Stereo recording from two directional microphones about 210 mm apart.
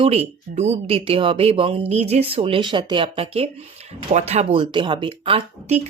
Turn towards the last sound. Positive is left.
turn(degrees=-30)  # may be behind; listen again after turning